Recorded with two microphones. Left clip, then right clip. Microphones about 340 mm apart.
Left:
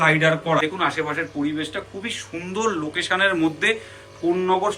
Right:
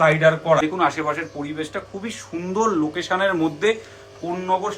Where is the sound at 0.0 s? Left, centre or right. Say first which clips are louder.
Right 2 dB; centre.